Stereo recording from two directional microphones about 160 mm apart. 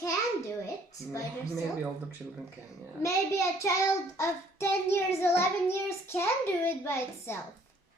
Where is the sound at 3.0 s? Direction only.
20° left (ahead or behind).